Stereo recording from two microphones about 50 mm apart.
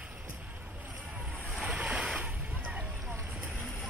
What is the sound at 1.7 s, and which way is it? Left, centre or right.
Boat, right.